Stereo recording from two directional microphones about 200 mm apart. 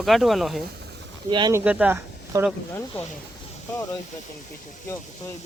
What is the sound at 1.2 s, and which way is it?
Speech, 20° right (ahead or behind).